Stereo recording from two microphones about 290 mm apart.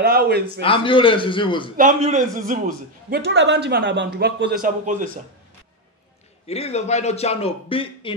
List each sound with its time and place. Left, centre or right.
0.0 s a man's voice: right
0.6 s a man's voice: centre
1.8 s a man's voice: right
6.4 s a man's voice: left